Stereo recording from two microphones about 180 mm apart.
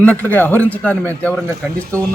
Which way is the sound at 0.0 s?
10° left (ahead or behind).